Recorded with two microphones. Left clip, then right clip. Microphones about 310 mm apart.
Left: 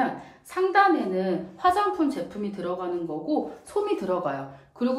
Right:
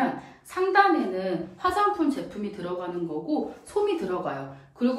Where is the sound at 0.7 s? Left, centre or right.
Left.